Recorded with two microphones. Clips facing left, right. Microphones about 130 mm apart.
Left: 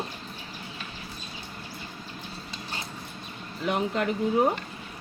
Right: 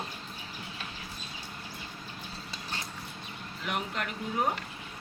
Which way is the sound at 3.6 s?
35° left (ahead or behind).